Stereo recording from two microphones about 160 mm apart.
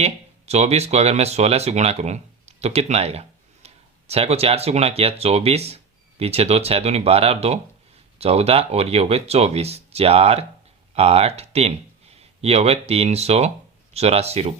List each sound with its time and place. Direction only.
0.0 s speech: 40° right (ahead or behind)